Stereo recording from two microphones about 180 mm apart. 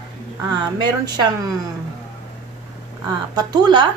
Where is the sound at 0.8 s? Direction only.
25° right (ahead or behind).